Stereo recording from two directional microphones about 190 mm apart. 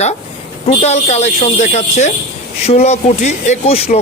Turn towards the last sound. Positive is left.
turn(degrees=30)  # may be behind; listen again after turning